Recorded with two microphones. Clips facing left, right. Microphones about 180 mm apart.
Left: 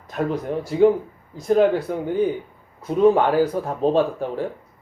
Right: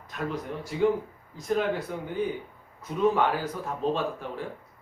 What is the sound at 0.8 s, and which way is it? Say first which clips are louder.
Speech: left 8 dB; 35° left (ahead or behind).